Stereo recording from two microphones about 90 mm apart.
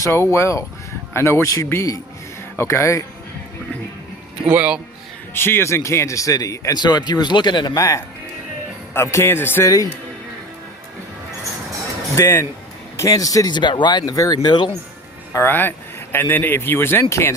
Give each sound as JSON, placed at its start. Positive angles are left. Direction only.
{"t": 0.0, "sound": "speech", "side_deg": 30}
{"t": 4.4, "sound": "speech", "side_deg": -15}
{"t": 5.3, "sound": "speech", "side_deg": 25}
{"t": 6.7, "sound": "speech", "side_deg": 55}
{"t": 8.9, "sound": "speech", "side_deg": 25}
{"t": 9.6, "sound": "speech", "side_deg": 40}
{"t": 12.1, "sound": "speech", "side_deg": 30}
{"t": 15.3, "sound": "speech", "side_deg": 25}